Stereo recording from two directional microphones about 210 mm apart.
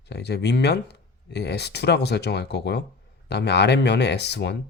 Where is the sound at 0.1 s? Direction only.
50° left (ahead or behind).